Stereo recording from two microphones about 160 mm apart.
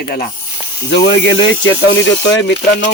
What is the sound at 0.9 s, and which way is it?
Speech, 90° left.